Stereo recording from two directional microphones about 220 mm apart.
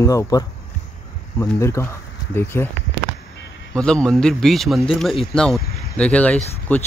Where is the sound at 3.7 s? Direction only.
5° left (ahead or behind).